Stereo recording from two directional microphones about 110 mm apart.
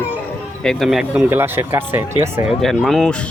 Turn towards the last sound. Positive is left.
turn(degrees=10)  # may be behind; listen again after turning